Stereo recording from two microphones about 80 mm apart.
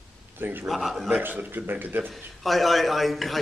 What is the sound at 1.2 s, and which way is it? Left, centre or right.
Speech, right.